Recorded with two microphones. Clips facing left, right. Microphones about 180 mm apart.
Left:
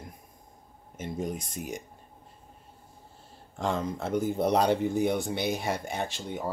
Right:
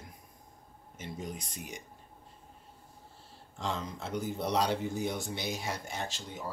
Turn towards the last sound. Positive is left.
turn(degrees=60)  # may be behind; listen again after turning